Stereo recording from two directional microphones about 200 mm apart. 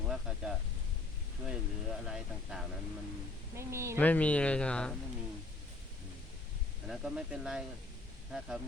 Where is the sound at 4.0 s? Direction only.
10° left (ahead or behind).